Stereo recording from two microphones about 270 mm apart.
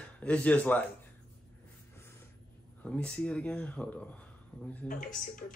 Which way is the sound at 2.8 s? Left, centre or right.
Centre.